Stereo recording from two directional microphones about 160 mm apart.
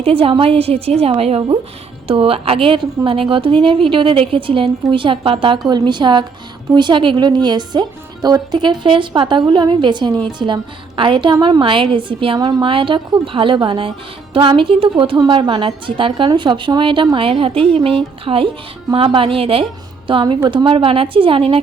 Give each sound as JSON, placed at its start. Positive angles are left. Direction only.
{"t": 0.0, "sound": "a woman's voice", "side_deg": -35}